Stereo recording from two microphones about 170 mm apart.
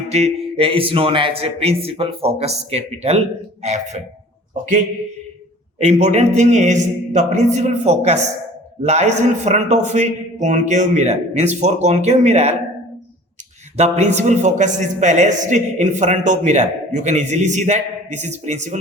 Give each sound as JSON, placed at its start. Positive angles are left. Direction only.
{"t": 0.1, "sound": "a man's voice", "side_deg": -35}
{"t": 5.8, "sound": "a man's voice", "side_deg": -40}
{"t": 13.7, "sound": "a man's voice", "side_deg": -40}